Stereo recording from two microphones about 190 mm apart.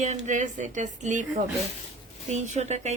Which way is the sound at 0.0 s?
40° right (ahead or behind).